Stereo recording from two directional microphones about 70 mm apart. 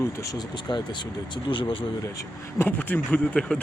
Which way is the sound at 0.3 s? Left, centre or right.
Left.